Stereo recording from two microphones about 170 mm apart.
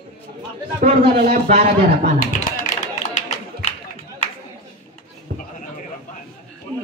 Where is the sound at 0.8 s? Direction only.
55° right (ahead or behind).